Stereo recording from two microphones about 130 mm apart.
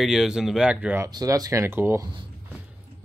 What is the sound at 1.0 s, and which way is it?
Speech, 25° right (ahead or behind).